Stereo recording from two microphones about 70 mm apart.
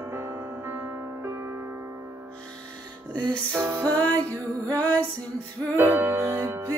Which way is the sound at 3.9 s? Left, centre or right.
Left.